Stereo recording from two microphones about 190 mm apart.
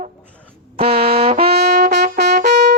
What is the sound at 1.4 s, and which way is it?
Brass instrument, 60° right (ahead or behind).